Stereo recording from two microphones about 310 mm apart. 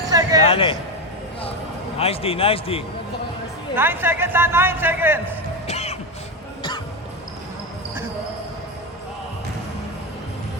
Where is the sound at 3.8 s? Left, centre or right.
Centre.